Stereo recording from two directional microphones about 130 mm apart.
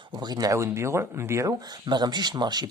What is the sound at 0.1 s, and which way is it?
Speech, 30° right (ahead or behind).